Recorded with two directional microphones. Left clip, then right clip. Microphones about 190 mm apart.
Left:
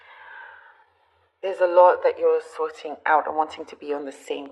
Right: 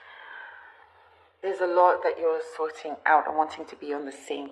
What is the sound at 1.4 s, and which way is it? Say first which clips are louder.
Speech: left 5 dB; 25° left (ahead or behind).